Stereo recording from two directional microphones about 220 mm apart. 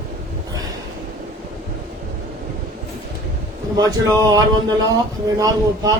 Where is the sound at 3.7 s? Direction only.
15° right (ahead or behind).